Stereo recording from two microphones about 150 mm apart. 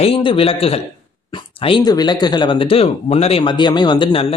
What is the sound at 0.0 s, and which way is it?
Speech, 35° left (ahead or behind).